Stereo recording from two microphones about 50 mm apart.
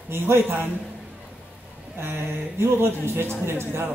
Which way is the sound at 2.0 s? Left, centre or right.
Right.